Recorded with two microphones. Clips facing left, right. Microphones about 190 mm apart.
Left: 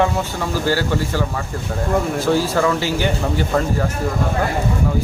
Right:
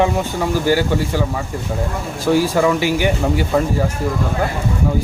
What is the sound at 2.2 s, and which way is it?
Speech, 15° right (ahead or behind).